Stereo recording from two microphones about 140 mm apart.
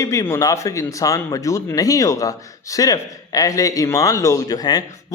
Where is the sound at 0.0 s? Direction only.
20° left (ahead or behind).